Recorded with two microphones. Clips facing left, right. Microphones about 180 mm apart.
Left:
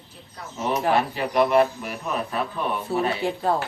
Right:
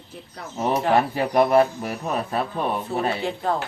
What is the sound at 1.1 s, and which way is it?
Mantra, 45° right (ahead or behind).